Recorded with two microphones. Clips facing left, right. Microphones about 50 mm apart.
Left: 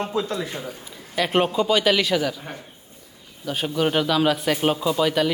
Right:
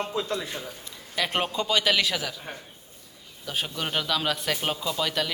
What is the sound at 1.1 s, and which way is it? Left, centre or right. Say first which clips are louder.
A man's voice: left 6 dB; centre.